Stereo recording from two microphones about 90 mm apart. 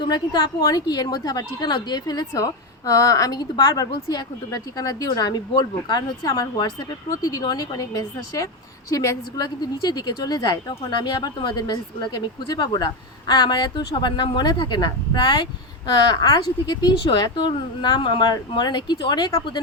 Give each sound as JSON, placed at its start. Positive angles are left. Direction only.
{"t": 0.0, "sound": "a woman's voice", "side_deg": 55}